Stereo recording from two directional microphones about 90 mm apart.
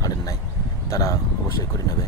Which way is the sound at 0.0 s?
40° left (ahead or behind).